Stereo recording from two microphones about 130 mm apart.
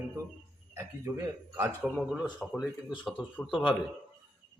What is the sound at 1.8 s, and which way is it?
Speech, 5° right (ahead or behind).